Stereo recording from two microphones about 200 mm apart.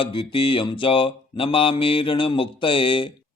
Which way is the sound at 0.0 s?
25° left (ahead or behind).